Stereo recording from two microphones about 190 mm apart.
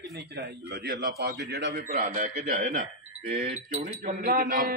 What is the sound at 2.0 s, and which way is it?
A man's voice, 40° right (ahead or behind).